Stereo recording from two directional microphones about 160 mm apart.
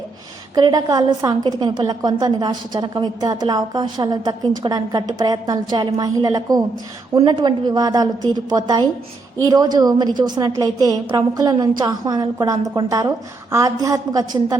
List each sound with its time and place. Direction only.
0.5 s a woman's voice: 25° right (ahead or behind)